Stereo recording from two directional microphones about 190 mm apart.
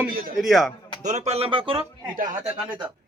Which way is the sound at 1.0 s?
35° right (ahead or behind).